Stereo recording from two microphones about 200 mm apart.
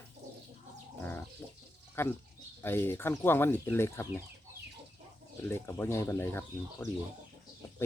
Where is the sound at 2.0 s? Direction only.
10° left (ahead or behind).